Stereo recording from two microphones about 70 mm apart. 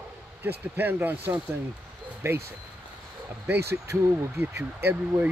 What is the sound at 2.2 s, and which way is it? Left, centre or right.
Speech, right.